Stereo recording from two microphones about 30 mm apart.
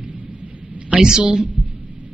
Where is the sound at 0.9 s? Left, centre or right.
Right.